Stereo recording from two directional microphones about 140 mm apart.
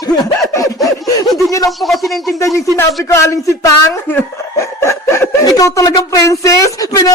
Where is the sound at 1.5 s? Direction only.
25° left (ahead or behind).